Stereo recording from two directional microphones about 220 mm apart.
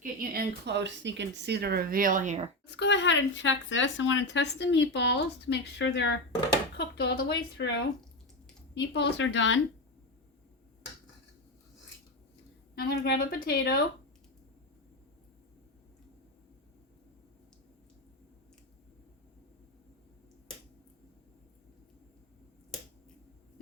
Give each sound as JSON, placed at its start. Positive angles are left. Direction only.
{"t": 0.0, "sound": "speech", "side_deg": -40}
{"t": 2.6, "sound": "speech", "side_deg": 50}
{"t": 8.7, "sound": "speech", "side_deg": 50}
{"t": 12.7, "sound": "speech", "side_deg": 45}